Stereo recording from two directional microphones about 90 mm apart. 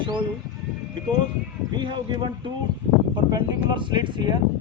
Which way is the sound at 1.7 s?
60° right (ahead or behind).